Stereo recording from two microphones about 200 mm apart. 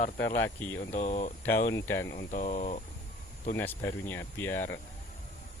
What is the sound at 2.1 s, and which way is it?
Speech, 40° left (ahead or behind).